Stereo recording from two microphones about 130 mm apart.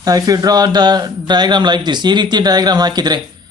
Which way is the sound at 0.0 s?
30° right (ahead or behind).